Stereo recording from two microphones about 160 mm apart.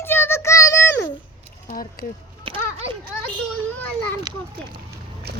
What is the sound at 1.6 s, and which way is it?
Speech, 60° left (ahead or behind).